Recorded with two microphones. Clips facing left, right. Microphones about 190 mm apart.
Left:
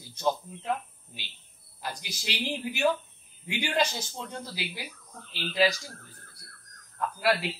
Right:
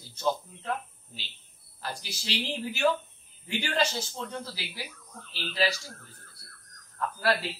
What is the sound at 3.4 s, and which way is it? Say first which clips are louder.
A man's voice: left 1 dB; 15° left (ahead or behind).